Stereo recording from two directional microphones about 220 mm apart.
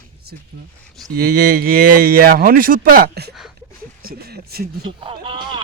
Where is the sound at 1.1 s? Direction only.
40° right (ahead or behind).